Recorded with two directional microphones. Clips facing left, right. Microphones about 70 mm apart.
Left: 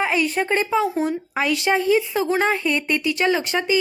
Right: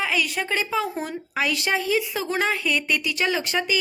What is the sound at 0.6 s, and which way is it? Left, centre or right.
A woman's voice, centre.